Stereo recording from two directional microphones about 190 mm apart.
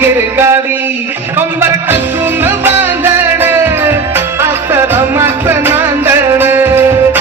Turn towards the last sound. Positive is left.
turn(degrees=-10)  # may be behind; listen again after turning